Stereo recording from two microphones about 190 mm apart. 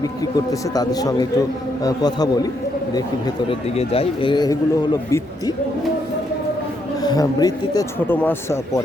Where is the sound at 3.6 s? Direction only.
30° left (ahead or behind).